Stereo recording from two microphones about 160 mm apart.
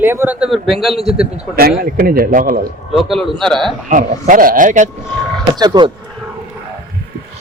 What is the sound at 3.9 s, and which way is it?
Speech, 60° right (ahead or behind).